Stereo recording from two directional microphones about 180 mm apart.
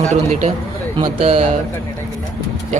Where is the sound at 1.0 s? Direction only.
30° right (ahead or behind).